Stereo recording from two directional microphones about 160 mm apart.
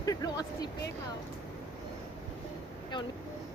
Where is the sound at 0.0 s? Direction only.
20° left (ahead or behind).